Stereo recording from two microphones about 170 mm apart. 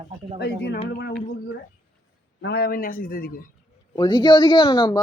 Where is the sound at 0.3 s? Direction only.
80° left.